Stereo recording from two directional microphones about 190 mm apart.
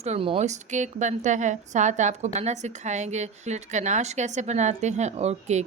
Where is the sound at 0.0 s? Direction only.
30° right (ahead or behind).